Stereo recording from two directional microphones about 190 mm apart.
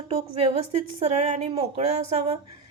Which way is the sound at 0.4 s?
35° right (ahead or behind).